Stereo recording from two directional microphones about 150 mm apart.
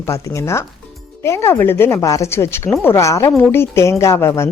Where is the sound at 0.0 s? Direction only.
20° left (ahead or behind).